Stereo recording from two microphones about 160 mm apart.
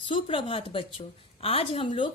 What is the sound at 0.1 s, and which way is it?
A woman's voice, 35° left (ahead or behind).